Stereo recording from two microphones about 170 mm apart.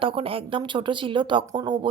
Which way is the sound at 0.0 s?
30° right (ahead or behind).